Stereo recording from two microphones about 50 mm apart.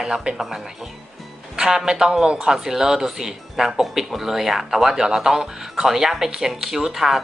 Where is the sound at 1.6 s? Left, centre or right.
Centre.